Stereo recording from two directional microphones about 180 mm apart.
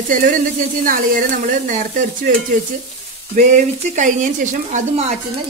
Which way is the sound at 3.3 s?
45° right (ahead or behind).